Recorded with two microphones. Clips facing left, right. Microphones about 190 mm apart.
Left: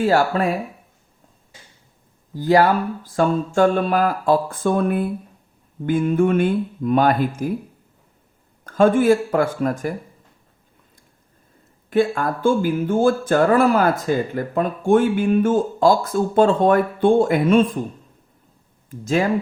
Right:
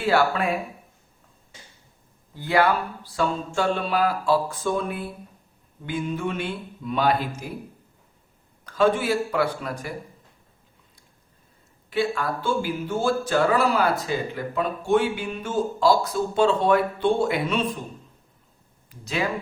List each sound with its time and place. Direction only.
0.0 s speech: 40° left (ahead or behind)
2.3 s speech: 40° left (ahead or behind)
8.6 s speech: 50° left (ahead or behind)
11.9 s speech: 50° left (ahead or behind)
18.9 s speech: 45° left (ahead or behind)